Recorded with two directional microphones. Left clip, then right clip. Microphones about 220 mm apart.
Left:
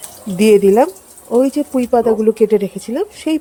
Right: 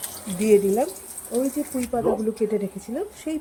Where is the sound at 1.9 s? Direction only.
40° left (ahead or behind).